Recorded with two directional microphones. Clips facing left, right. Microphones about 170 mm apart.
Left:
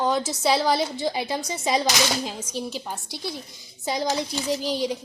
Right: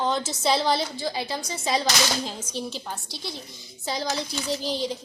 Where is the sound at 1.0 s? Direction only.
20° left (ahead or behind).